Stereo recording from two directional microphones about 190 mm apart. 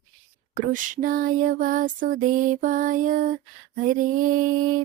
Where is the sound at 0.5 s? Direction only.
45° right (ahead or behind).